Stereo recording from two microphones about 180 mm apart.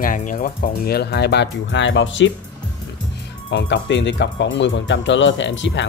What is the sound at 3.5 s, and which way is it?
Speech, 80° left.